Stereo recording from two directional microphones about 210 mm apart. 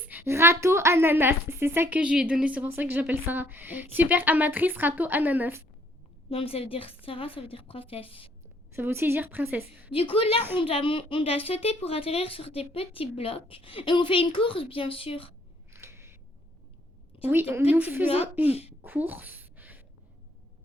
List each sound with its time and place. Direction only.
0.0 s a woman's voice: 10° right (ahead or behind)
6.3 s a woman's voice: 25° left (ahead or behind)
8.7 s a woman's voice: 10° right (ahead or behind)
9.9 s a woman's voice: 25° left (ahead or behind)
15.7 s single-lens reflex camera: 10° right (ahead or behind)
17.2 s a woman's voice: 10° right (ahead or behind)
18.4 s a woman's voice: 30° left (ahead or behind)
18.8 s a sound: 10° right (ahead or behind)